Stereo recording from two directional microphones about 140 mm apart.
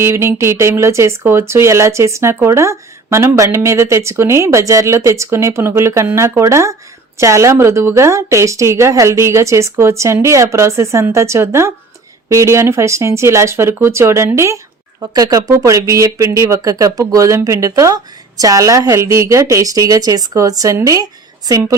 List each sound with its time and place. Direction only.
0.0 s speech: 20° right (ahead or behind)